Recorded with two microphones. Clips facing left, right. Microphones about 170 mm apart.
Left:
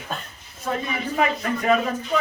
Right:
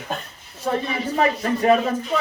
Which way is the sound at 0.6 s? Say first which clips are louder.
Right 3 dB; 35° right (ahead or behind).